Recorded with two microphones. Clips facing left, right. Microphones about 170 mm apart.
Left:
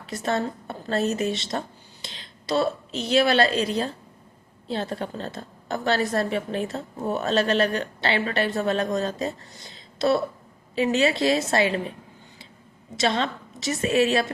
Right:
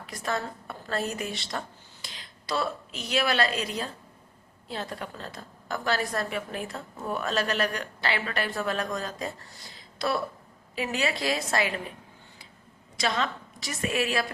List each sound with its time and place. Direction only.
0.0 s a woman's voice: 25° left (ahead or behind)
13.0 s a woman's voice: 25° left (ahead or behind)